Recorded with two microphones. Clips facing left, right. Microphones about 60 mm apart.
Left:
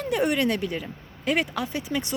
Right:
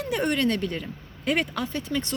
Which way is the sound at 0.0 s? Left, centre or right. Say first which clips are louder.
Left 1 dB; centre.